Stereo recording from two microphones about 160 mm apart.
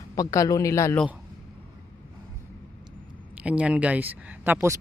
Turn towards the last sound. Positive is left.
turn(degrees=-15)  # may be behind; listen again after turning